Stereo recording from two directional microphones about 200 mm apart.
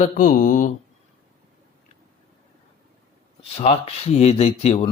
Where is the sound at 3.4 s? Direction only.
30° left (ahead or behind).